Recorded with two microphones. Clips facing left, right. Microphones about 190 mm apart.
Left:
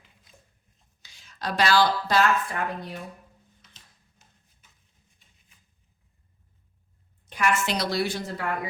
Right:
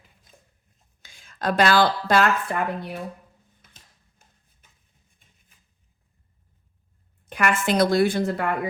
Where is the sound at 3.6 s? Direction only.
55° right (ahead or behind).